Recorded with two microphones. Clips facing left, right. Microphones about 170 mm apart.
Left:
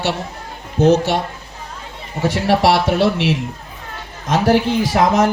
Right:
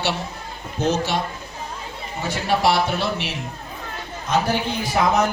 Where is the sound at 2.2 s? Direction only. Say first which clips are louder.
Left 5 dB; 85° left.